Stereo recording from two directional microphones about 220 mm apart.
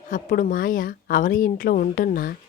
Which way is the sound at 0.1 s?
35° left (ahead or behind).